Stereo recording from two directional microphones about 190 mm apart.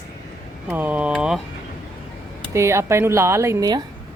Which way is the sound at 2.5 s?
15° right (ahead or behind).